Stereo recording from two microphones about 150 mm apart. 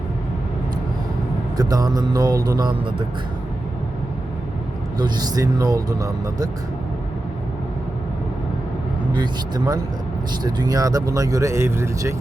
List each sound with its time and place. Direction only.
1.5 s speech: 25° right (ahead or behind)
4.9 s speech: 25° right (ahead or behind)
9.1 s speech: 30° right (ahead or behind)